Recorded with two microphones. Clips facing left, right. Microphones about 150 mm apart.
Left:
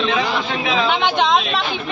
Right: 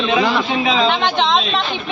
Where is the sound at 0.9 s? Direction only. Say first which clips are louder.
Even; 10° left (ahead or behind).